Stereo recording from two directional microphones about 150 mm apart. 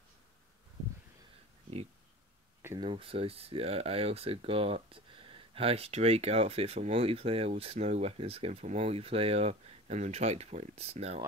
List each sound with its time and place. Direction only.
2.8 s speech: 35° right (ahead or behind)